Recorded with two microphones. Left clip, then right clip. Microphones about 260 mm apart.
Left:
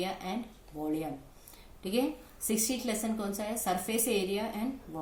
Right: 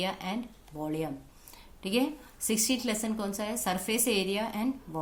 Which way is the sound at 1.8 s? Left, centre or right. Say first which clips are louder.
Right 2 dB; right.